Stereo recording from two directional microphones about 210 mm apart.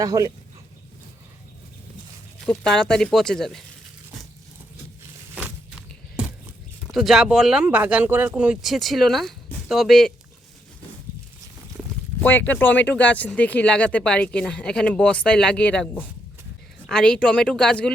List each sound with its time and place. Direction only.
0.0 s speech: 15° right (ahead or behind)
2.5 s speech: 5° left (ahead or behind)
5.3 s a sound: 5° right (ahead or behind)
6.9 s speech: centre (ahead or behind)
12.2 s speech: 10° left (ahead or behind)